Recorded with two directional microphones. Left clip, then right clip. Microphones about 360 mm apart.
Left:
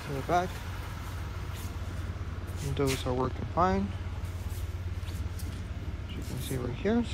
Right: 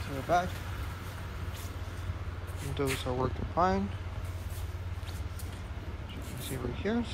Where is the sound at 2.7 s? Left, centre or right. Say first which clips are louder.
Left 2 dB; centre.